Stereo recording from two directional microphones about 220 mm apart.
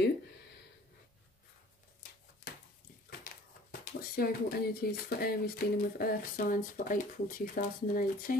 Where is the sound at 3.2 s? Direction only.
40° left (ahead or behind).